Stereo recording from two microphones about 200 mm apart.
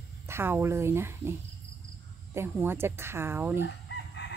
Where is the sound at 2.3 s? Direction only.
10° right (ahead or behind).